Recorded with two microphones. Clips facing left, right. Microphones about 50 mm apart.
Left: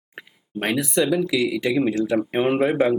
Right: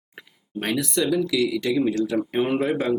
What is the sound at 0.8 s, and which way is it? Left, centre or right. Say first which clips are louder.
Speech: left 2 dB; centre.